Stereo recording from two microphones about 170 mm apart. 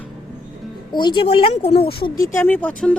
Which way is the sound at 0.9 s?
25° left (ahead or behind).